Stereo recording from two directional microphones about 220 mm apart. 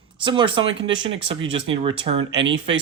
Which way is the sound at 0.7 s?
55° right (ahead or behind).